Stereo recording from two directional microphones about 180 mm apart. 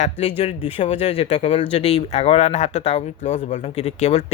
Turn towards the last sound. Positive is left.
turn(degrees=35)  # may be behind; listen again after turning